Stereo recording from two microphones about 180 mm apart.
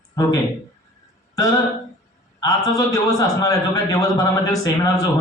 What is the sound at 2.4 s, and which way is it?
A man's voice, 20° left (ahead or behind).